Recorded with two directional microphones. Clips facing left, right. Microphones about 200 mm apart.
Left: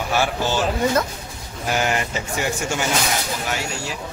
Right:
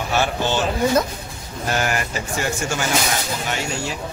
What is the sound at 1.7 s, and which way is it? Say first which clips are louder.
Speech: left 1 dB; 20° left (ahead or behind).